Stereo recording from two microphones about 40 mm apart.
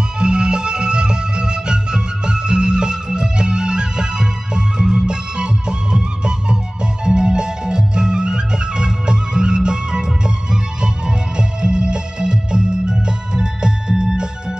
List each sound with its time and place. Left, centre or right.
0.2 s music: right